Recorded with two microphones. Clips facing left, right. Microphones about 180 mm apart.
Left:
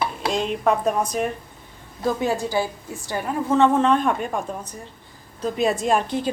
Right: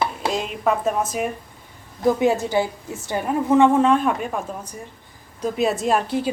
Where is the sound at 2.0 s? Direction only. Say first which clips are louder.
Right 4 dB; 20° right (ahead or behind).